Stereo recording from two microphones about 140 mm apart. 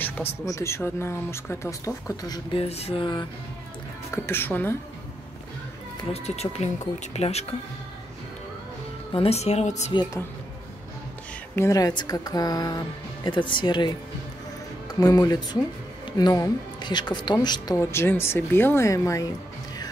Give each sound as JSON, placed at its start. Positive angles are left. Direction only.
{"t": 0.5, "sound": "a woman's voice", "side_deg": 20}
{"t": 2.5, "sound": "speech", "side_deg": 45}
{"t": 4.1, "sound": "speech", "side_deg": 15}
{"t": 6.1, "sound": "speech", "side_deg": 50}
{"t": 9.1, "sound": "speech", "side_deg": 45}
{"t": 11.5, "sound": "a woman's voice", "side_deg": 20}
{"t": 17.7, "sound": "speech", "side_deg": 15}